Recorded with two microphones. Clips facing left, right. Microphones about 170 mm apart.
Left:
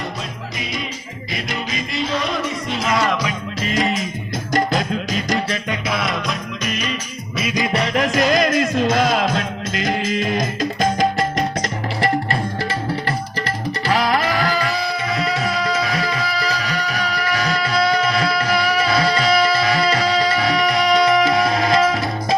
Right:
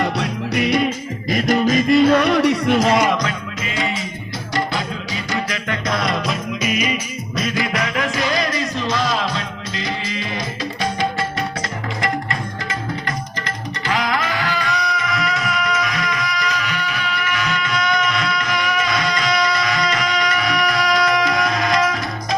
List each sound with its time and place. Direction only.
0.0 s music: 70° right (ahead or behind)
1.3 s music: 45° right (ahead or behind); by 2.7 s 70° right (ahead or behind)
3.6 s music: 40° left (ahead or behind)
5.9 s music: centre (ahead or behind)
7.5 s music: 25° left (ahead or behind); by 11.4 s 45° left (ahead or behind)
11.9 s music: 30° left (ahead or behind)
13.8 s music: 35° left (ahead or behind)